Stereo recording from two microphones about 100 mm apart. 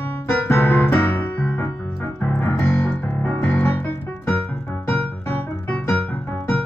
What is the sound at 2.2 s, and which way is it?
Keyboard, 10° left (ahead or behind).